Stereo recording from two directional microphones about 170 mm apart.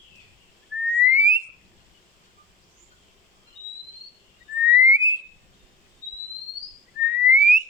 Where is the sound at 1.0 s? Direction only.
10° right (ahead or behind).